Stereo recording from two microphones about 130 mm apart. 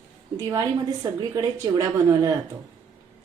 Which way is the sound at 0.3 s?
25° right (ahead or behind).